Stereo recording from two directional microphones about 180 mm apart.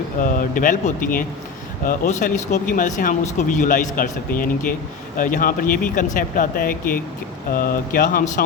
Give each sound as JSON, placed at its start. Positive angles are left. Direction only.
{"t": 0.2, "sound": "speech", "side_deg": 50}